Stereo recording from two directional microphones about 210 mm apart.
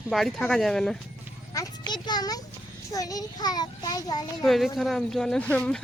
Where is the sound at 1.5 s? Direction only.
20° left (ahead or behind).